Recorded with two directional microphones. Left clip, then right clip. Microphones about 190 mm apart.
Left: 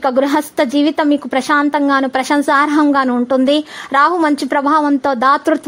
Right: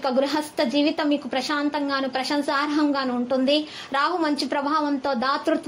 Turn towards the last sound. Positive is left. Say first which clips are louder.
# left 10 dB
turn(degrees=45)  # may be behind; listen again after turning